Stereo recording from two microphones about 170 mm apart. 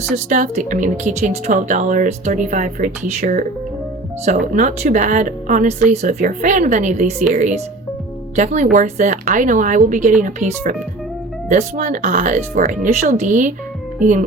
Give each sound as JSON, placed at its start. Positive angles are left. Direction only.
{"t": 0.3, "sound": "speech", "side_deg": -45}
{"t": 8.4, "sound": "speech", "side_deg": -45}